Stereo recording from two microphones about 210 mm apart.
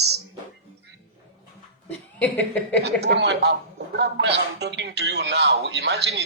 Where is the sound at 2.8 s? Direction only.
50° right (ahead or behind).